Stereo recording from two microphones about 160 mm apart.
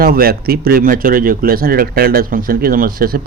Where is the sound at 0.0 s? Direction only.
70° right (ahead or behind).